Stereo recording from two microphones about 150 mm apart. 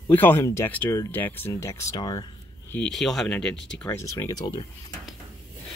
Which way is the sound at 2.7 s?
5° left (ahead or behind).